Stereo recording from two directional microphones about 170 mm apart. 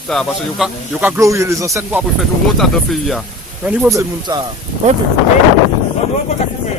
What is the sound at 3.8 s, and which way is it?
Speech, 20° right (ahead or behind).